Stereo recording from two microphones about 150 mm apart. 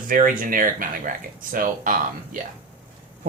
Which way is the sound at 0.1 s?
65° right (ahead or behind).